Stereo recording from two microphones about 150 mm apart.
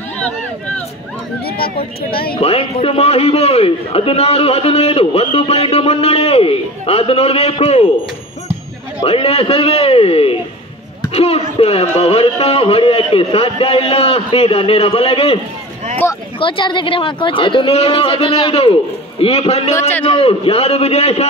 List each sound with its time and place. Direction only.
1.4 s a sound: 90° left
2.3 s a man's voice: 40° left (ahead or behind)
9.0 s a man's voice: 40° left (ahead or behind)
16.0 s a man's voice: 15° left (ahead or behind)
16.3 s a man's voice: 35° left (ahead or behind)
19.7 s a man's voice: 15° left (ahead or behind)
20.1 s a man's voice: 40° left (ahead or behind)